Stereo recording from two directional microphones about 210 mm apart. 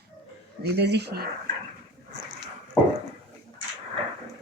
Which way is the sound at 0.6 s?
50° right (ahead or behind).